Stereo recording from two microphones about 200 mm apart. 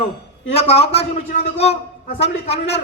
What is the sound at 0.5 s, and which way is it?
A man's voice, 30° left (ahead or behind).